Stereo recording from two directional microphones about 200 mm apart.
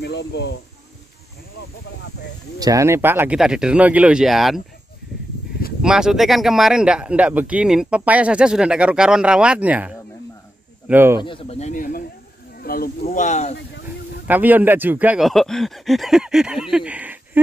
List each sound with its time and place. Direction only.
0.0 s speech: 55° left (ahead or behind)
2.6 s speech: 15° right (ahead or behind)
5.8 s speech: 5° right (ahead or behind)
11.1 s speech: 25° left (ahead or behind); by 12.9 s 50° left (ahead or behind)
13.0 s speech: 35° left (ahead or behind)
14.2 s speech: 10° right (ahead or behind)